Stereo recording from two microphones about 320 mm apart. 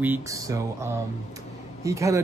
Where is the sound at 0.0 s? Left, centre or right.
Centre.